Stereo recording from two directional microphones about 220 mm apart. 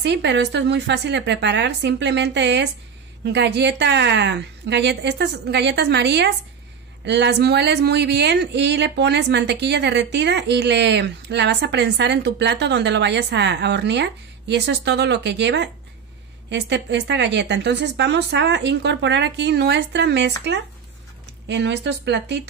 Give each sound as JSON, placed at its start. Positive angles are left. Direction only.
{"t": 0.0, "sound": "speech", "side_deg": -50}
{"t": 21.5, "sound": "speech", "side_deg": -50}